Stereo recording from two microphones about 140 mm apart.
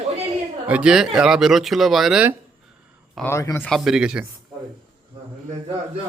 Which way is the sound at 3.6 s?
Centre (ahead or behind).